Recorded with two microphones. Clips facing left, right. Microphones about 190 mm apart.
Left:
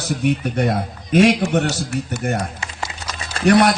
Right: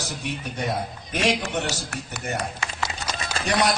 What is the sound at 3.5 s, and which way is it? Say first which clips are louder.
Speech: left 10 dB; 60° left (ahead or behind).